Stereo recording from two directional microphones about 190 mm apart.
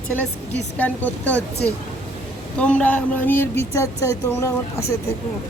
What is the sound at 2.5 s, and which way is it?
Speech, 5° left (ahead or behind).